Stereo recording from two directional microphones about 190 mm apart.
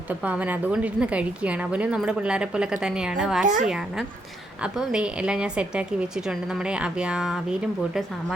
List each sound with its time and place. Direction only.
0.1 s a woman's voice: 5° right (ahead or behind)
3.4 s a woman's voice: 40° right (ahead or behind)
3.7 s a woman's voice: 5° right (ahead or behind)